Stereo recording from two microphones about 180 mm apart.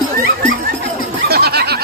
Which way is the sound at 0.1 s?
50° right (ahead or behind).